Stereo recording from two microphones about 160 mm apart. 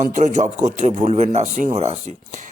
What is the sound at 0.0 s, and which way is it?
Speech, 50° right (ahead or behind).